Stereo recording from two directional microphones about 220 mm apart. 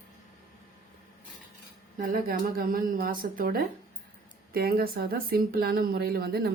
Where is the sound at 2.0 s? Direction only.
40° right (ahead or behind).